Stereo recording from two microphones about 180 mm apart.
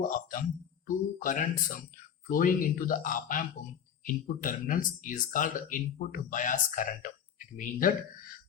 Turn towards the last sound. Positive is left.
turn(degrees=50)  # may be behind; listen again after turning